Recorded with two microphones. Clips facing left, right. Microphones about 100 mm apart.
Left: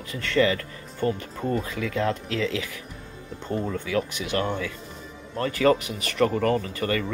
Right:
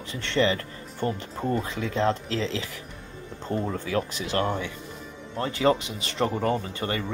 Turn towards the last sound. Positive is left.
turn(degrees=-25)  # may be behind; listen again after turning